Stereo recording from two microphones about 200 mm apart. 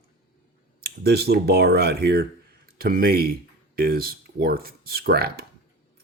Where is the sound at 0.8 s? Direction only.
50° right (ahead or behind).